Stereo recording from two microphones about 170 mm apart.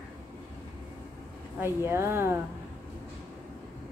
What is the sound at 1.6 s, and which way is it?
Child singing, 15° right (ahead or behind).